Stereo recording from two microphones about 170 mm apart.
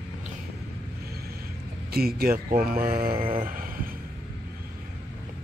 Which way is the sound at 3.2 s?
30° right (ahead or behind).